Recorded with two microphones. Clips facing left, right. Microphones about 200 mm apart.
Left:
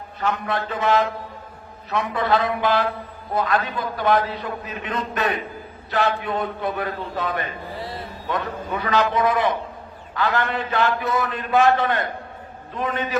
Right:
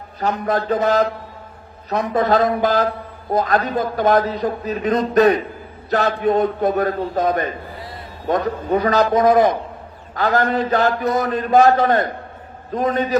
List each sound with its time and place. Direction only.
0.2 s a man's voice: 35° right (ahead or behind)